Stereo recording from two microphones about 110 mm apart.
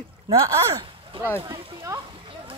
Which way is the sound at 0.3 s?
50° right (ahead or behind).